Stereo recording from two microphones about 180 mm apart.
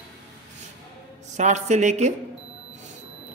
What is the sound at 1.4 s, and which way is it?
Speech, 40° right (ahead or behind).